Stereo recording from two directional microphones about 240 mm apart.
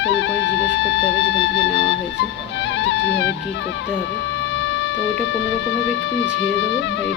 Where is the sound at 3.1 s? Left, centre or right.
Left.